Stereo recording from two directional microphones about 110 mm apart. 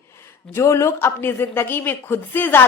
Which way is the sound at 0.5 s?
25° left (ahead or behind).